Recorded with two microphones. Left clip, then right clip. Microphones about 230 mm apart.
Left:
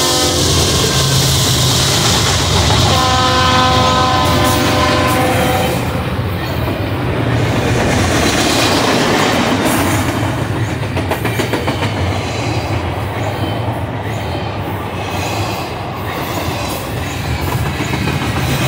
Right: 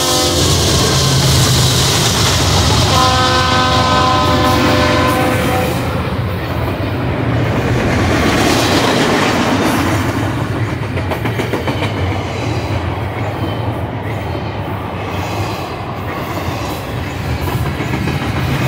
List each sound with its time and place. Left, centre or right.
0.0 s train: centre
3.0 s train: centre